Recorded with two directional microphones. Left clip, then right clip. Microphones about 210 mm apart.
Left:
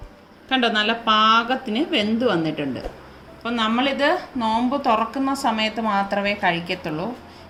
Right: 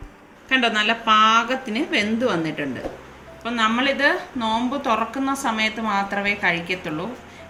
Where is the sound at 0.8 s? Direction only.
25° left (ahead or behind).